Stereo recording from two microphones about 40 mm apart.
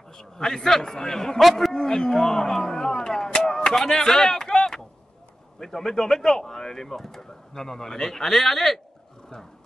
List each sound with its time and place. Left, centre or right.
0.2 s speech: centre
1.4 s a man's voice: centre
1.7 s speech: centre